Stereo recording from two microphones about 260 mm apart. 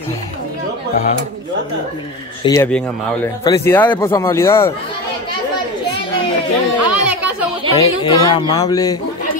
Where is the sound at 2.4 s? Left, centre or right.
Centre.